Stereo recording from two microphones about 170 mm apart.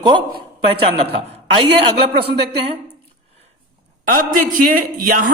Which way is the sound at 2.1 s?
70° right (ahead or behind).